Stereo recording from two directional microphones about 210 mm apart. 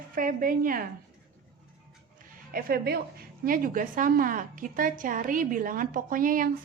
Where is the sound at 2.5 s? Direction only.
45° right (ahead or behind).